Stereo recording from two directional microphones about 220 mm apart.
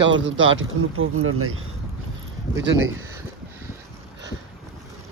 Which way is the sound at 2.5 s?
60° right (ahead or behind).